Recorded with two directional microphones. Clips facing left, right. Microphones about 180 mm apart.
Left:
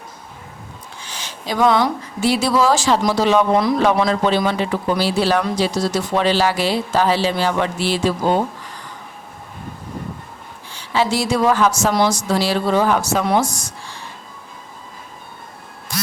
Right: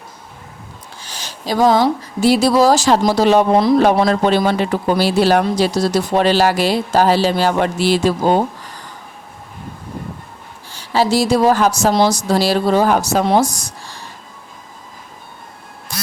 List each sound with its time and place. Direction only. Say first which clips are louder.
1.0 s speech: right 3 dB; 40° right (ahead or behind)
3.8 s speech: right 3 dB; 40° right (ahead or behind)
10.7 s speech: right 3 dB; 40° right (ahead or behind)